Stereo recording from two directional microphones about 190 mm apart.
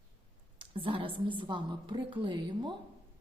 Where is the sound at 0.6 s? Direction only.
25° right (ahead or behind).